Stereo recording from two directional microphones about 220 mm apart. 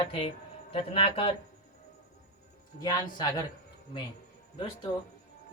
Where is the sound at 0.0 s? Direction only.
25° left (ahead or behind).